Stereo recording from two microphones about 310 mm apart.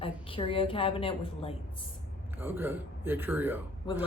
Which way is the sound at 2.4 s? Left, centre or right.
Centre.